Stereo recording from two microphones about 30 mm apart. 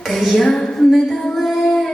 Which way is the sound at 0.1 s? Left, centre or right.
Centre.